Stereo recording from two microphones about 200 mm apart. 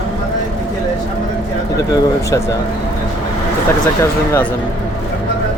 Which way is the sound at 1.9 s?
15° left (ahead or behind).